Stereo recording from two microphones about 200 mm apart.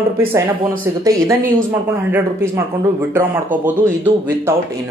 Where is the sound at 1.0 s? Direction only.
15° right (ahead or behind).